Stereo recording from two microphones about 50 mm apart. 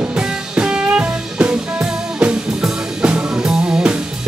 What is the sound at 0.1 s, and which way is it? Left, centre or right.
Music, centre.